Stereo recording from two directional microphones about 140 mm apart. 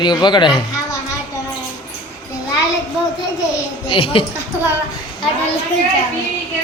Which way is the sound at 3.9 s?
40° left (ahead or behind).